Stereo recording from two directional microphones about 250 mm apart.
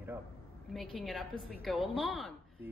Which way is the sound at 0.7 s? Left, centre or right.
Centre.